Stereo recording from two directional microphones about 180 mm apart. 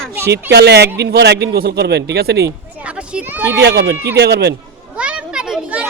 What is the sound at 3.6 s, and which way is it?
Speech, 75° right (ahead or behind).